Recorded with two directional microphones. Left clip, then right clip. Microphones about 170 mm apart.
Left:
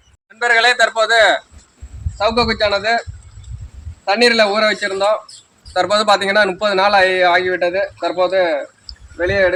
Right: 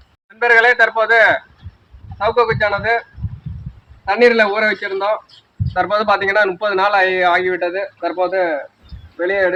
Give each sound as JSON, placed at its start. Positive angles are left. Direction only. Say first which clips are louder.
{"t": 0.3, "sound": "speech", "louder": "right 2 dB", "side_deg": 20}
{"t": 4.0, "sound": "a man's voice", "louder": "right 1 dB", "side_deg": 35}